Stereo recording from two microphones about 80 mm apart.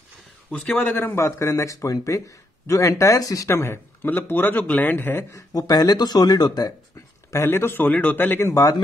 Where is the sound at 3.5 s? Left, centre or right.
Left.